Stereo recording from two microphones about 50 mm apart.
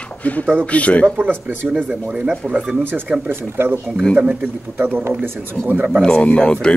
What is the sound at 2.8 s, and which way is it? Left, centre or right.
Speech, right.